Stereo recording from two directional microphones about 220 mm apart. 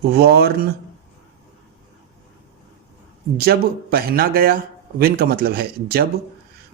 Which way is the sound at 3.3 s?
45° right (ahead or behind).